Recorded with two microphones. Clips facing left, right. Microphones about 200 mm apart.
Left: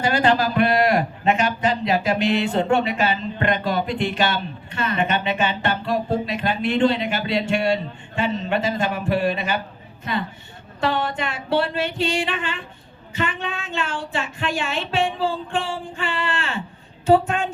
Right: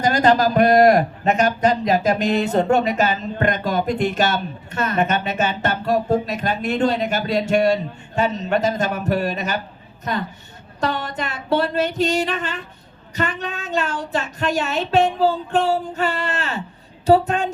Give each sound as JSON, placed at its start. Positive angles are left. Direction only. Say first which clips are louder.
{"t": 0.0, "sound": "a man's voice", "louder": "right 3 dB", "side_deg": -40}
{"t": 10.8, "sound": "music", "louder": "left 1 dB", "side_deg": -40}
{"t": 13.1, "sound": "speech", "louder": "right 1 dB", "side_deg": -40}
{"t": 17.1, "sound": "music", "louder": "right 2 dB", "side_deg": -40}